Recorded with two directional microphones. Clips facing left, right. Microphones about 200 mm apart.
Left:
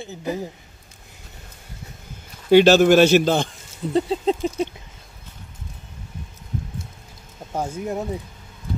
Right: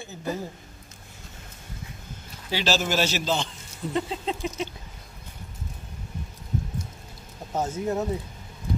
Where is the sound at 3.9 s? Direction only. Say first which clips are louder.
Left 8 dB; 35° left (ahead or behind).